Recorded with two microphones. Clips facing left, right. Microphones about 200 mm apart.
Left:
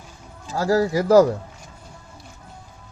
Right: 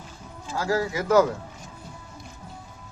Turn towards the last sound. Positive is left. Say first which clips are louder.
# left 5 dB
turn(degrees=35)  # may be behind; listen again after turning